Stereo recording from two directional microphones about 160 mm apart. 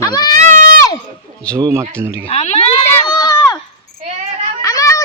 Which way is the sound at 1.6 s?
15° right (ahead or behind).